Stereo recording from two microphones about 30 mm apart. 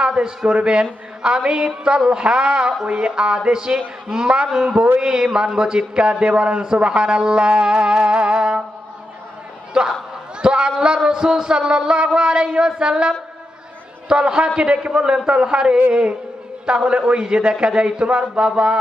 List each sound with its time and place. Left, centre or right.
0.0 s a man's voice: right
9.7 s speech: centre
10.4 s a sound: right
10.8 s a man's voice: right